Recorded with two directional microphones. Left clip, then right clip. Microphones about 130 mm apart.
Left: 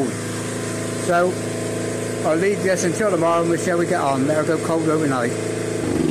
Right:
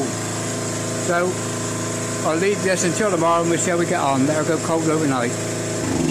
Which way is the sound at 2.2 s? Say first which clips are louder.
Left 1 dB; 5° right (ahead or behind).